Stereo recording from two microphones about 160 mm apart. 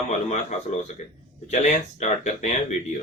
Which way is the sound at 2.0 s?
45° left (ahead or behind).